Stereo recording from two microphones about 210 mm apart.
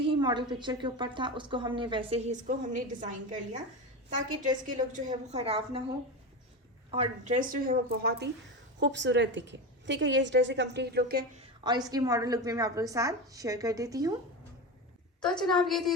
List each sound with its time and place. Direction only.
0.0 s a woman's voice: 20° right (ahead or behind)
5.0 s a woman's voice: 30° right (ahead or behind)
6.9 s a woman's voice: 30° right (ahead or behind); by 11.3 s 45° right (ahead or behind)
11.3 s a woman's voice: 25° right (ahead or behind)
15.2 s a woman's voice: 5° left (ahead or behind)